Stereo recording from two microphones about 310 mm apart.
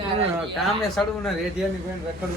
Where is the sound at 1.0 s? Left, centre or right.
Centre.